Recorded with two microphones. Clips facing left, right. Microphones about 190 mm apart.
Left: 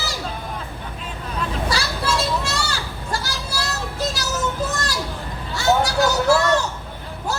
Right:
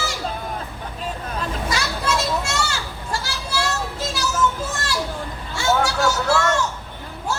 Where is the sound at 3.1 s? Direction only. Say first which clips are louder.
Right 1 dB; 40° left (ahead or behind).